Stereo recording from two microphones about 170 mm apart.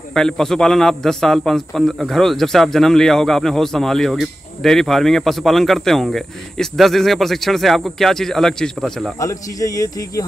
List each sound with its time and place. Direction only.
0.1 s a man's voice: 5° left (ahead or behind)
9.2 s speech: 20° left (ahead or behind)